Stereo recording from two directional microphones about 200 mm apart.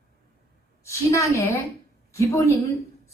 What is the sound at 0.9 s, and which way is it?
A woman's voice, 15° left (ahead or behind).